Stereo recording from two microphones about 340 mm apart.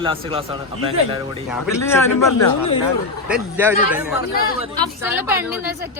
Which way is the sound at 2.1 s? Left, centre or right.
Left.